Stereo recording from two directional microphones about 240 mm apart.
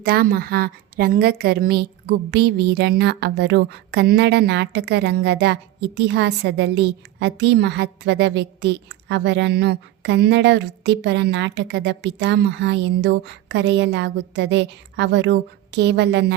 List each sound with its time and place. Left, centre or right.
0.0 s a woman's voice: right